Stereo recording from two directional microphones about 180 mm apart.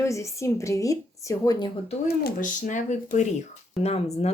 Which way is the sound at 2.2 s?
45° left (ahead or behind).